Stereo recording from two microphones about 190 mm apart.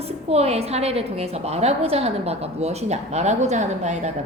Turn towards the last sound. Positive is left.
turn(degrees=-40)  # may be behind; listen again after turning